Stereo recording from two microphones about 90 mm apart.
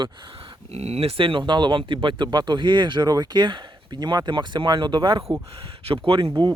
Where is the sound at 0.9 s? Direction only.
90° right; by 5.2 s 65° right (ahead or behind).